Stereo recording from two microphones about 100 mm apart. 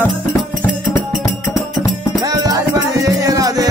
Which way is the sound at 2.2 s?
35° right (ahead or behind).